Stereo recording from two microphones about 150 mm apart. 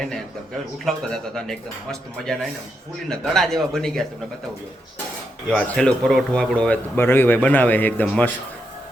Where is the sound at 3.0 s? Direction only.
5° left (ahead or behind).